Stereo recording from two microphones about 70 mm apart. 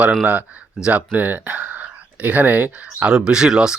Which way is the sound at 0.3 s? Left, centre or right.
Centre.